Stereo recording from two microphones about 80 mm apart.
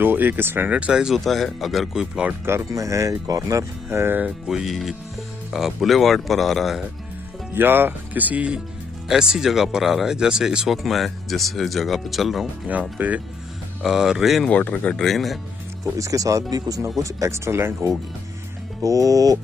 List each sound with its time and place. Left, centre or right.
0.0 s speech: right; by 2.0 s centre
2.7 s speech: right
4.0 s speech: right
4.5 s speech: centre
7.5 s speech: right
9.1 s speech: centre
12.9 s speech: centre
13.8 s speech: centre
14.5 s speech: centre
15.0 s speech: centre
16.0 s speech: right
17.0 s speech: right
18.8 s speech: right